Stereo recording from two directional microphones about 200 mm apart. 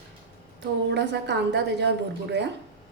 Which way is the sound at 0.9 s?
60° right (ahead or behind).